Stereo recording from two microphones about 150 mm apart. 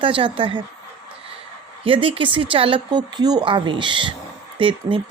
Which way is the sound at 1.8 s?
35° right (ahead or behind).